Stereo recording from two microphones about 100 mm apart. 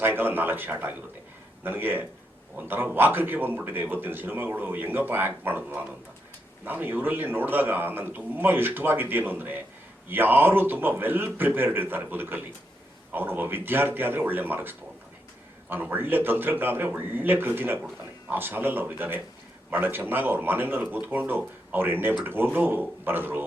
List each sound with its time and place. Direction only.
0.0 s speech: 20° right (ahead or behind)